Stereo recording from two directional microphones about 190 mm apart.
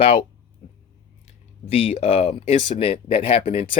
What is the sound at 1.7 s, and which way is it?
Speech, 30° left (ahead or behind).